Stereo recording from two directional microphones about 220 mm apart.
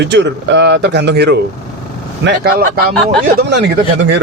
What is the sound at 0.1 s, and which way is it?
Speech, 55° right (ahead or behind).